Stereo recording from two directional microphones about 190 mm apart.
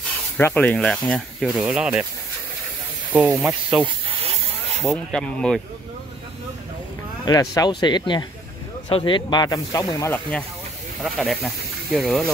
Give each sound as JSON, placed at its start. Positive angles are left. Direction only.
{"t": 0.4, "sound": "speech", "side_deg": 10}
{"t": 3.1, "sound": "speech", "side_deg": -10}
{"t": 4.8, "sound": "speech", "side_deg": 5}
{"t": 7.2, "sound": "speech", "side_deg": 20}
{"t": 11.0, "sound": "speech", "side_deg": 0}